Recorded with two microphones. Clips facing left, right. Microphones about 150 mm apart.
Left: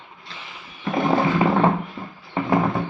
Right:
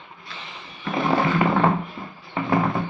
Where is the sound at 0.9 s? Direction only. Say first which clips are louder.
Left 1 dB; 10° left (ahead or behind).